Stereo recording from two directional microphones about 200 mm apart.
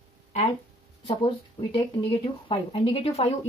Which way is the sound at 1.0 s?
25° left (ahead or behind).